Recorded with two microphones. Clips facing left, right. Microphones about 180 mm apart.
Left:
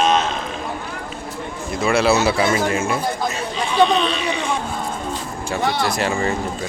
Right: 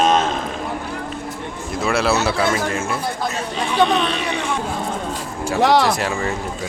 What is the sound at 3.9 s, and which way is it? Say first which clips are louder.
Speech: even; 60° right (ahead or behind).